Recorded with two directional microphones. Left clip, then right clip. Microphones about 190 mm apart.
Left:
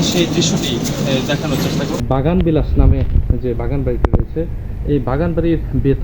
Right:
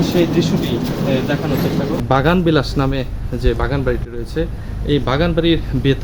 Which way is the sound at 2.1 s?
30° left (ahead or behind).